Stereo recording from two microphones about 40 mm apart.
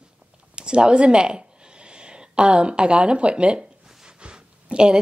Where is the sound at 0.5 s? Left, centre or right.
Right.